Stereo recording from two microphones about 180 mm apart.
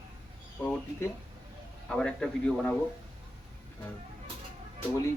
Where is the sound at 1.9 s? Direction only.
5° left (ahead or behind).